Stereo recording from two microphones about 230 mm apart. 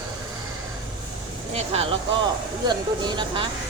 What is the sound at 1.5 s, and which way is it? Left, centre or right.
Speech, right.